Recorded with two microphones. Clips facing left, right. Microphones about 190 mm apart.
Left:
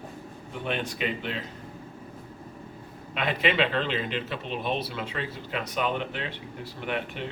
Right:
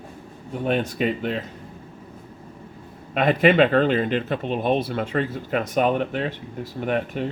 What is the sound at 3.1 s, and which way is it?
Speech, 50° right (ahead or behind).